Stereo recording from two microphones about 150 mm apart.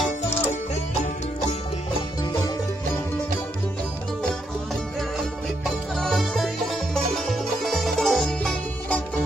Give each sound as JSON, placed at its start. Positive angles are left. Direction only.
{"t": 5.9, "sound": "music", "side_deg": 5}